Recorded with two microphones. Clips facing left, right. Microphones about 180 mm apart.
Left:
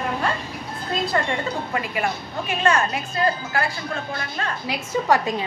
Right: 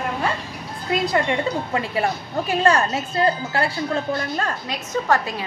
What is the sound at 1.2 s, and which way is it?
A woman's voice, 30° right (ahead or behind).